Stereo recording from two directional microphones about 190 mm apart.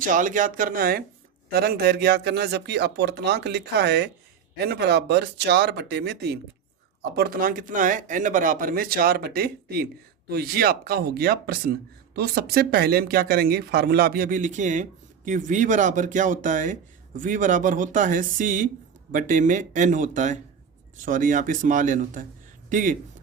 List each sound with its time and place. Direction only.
0.0 s speech: 45° right (ahead or behind); by 6.4 s 60° right (ahead or behind)
7.2 s speech: 50° right (ahead or behind)